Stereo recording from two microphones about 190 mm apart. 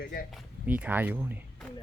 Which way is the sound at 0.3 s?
5° right (ahead or behind).